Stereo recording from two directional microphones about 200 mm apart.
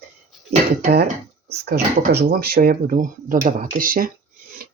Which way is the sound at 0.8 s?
50° right (ahead or behind).